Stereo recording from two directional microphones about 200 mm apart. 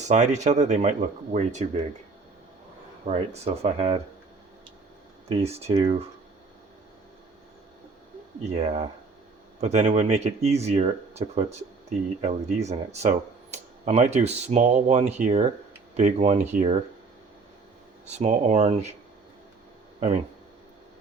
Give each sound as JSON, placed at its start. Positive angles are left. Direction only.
{"t": 0.0, "sound": "speech", "side_deg": -35}
{"t": 3.1, "sound": "speech", "side_deg": -30}
{"t": 5.3, "sound": "speech", "side_deg": -30}
{"t": 8.5, "sound": "speech", "side_deg": -30}
{"t": 18.1, "sound": "speech", "side_deg": -35}